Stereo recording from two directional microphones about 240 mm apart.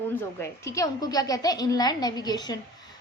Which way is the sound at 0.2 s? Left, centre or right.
Centre.